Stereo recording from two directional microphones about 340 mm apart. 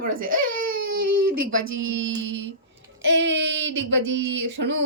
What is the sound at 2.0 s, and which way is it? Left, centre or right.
Speech, right.